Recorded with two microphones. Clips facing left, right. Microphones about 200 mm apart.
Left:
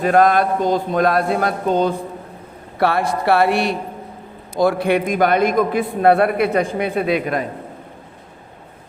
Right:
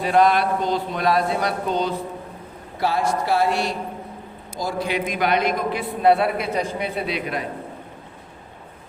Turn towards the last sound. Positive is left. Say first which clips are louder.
# left 7 dB
turn(degrees=50)  # may be behind; listen again after turning